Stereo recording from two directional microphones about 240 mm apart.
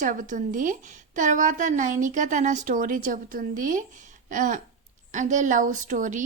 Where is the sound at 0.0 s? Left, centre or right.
Right.